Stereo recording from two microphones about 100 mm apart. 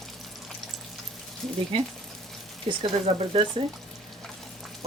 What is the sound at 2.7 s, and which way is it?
Speech, 50° right (ahead or behind).